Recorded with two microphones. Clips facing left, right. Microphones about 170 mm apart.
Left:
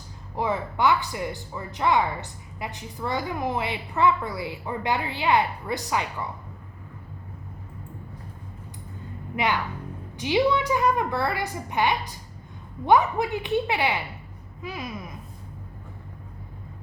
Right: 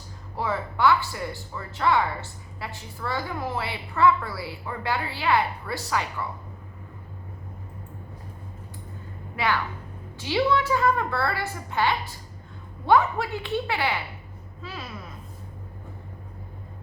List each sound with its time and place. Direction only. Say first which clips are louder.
0.3 s speech: left 2 dB; 20° left (ahead or behind)
9.3 s a woman's voice: left 1 dB; 20° left (ahead or behind)